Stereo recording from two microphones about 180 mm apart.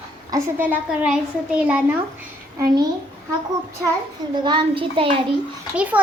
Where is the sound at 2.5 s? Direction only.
20° right (ahead or behind).